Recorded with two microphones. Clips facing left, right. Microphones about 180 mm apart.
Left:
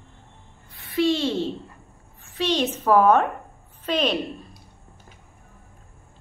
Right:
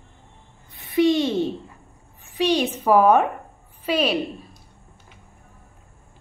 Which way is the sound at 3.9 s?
10° right (ahead or behind).